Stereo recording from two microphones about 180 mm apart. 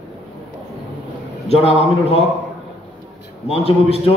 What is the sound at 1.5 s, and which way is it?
Speech, 35° left (ahead or behind).